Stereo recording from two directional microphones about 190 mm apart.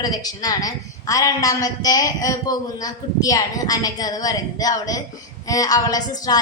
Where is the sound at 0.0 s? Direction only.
20° left (ahead or behind).